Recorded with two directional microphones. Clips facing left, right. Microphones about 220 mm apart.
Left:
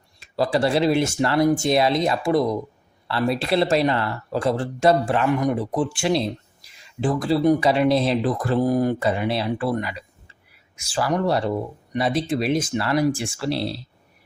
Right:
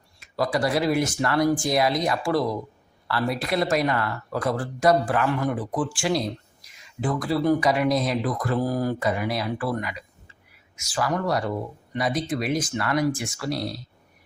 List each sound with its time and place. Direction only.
0.2 s speech: 30° left (ahead or behind)